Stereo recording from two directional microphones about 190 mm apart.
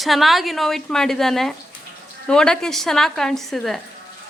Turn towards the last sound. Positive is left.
turn(degrees=0)  # may be behind; listen again after turning